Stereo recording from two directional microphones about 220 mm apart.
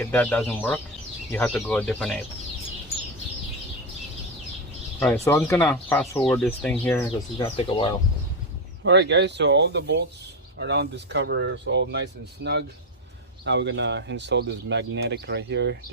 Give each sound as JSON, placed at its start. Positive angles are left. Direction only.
{"t": 0.0, "sound": "speech", "side_deg": 5}
{"t": 4.9, "sound": "speech", "side_deg": 10}
{"t": 7.3, "sound": "speech", "side_deg": 25}
{"t": 8.8, "sound": "speech", "side_deg": -50}